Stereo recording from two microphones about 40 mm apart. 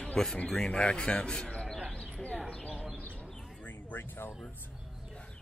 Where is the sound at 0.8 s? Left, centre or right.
Left.